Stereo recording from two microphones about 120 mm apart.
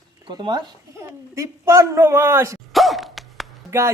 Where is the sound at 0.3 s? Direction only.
40° right (ahead or behind).